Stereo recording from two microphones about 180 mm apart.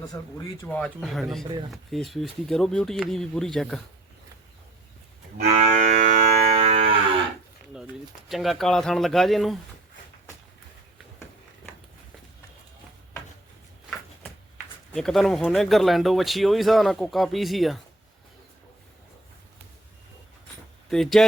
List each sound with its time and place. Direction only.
0.7 s speech: centre (ahead or behind)
5.4 s livestock: 35° right (ahead or behind)
8.3 s speech: centre (ahead or behind)
14.9 s speech: centre (ahead or behind)
20.9 s speech: centre (ahead or behind)